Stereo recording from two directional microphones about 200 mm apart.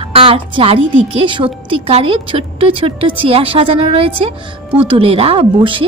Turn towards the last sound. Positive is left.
turn(degrees=-25)  # may be behind; listen again after turning